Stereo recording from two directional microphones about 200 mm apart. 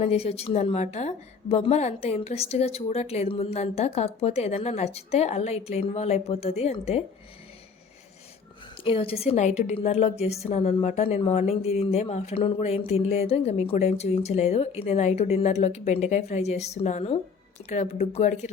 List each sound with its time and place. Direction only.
0.0 s a woman's voice: 30° left (ahead or behind)
8.8 s a woman's voice: 30° left (ahead or behind)